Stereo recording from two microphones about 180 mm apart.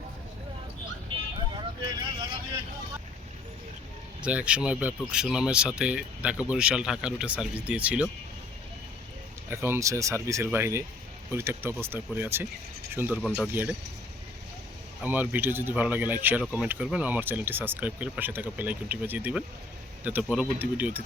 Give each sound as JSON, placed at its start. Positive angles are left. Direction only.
{"t": 1.1, "sound": "vehicle", "side_deg": -30}
{"t": 4.2, "sound": "speech", "side_deg": -5}
{"t": 9.5, "sound": "speech", "side_deg": -15}
{"t": 15.0, "sound": "speech", "side_deg": -10}